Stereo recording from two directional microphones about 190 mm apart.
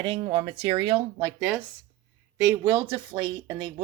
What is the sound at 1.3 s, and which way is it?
Speech, 10° right (ahead or behind).